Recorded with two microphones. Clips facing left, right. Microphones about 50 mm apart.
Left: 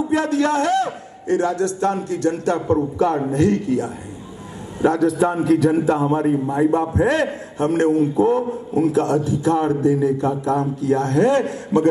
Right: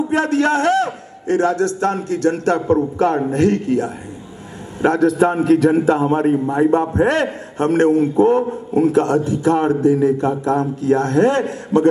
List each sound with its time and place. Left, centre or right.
0.1 s a man's voice: right